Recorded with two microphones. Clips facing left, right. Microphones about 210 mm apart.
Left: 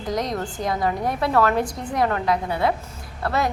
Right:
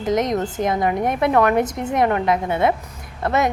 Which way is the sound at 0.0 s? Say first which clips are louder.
Right 6 dB; 20° right (ahead or behind).